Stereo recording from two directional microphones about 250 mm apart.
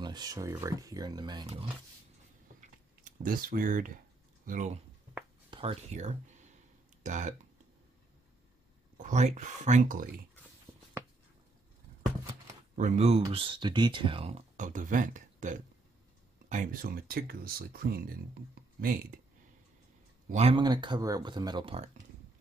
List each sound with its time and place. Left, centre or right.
0.0 s speech: centre
3.0 s speech: right
8.9 s speech: right
10.7 s writing: centre
12.7 s speech: right
20.2 s speech: right